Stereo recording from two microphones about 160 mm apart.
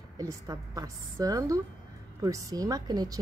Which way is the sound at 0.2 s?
20° right (ahead or behind).